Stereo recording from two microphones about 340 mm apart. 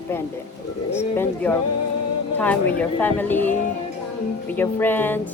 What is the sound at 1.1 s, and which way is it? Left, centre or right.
Speech, centre.